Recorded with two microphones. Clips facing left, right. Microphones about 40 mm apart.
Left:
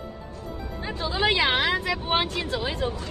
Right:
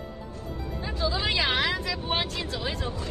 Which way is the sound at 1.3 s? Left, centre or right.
Left.